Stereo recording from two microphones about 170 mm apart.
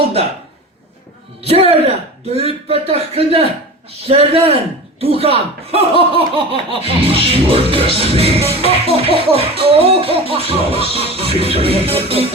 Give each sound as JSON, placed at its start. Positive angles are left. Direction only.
{"t": 1.5, "sound": "music", "side_deg": -35}